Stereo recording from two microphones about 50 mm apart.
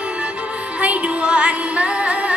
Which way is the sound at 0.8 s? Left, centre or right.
Right.